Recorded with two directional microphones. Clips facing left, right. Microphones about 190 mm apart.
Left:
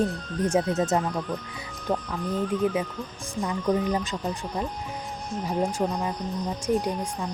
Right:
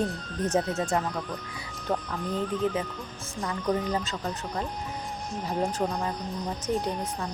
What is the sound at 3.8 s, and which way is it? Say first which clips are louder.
Speech: left 3 dB; 15° left (ahead or behind).